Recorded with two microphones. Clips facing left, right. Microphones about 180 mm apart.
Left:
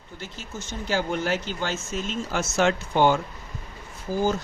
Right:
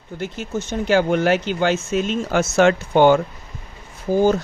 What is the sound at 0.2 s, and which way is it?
Speech, 65° right (ahead or behind).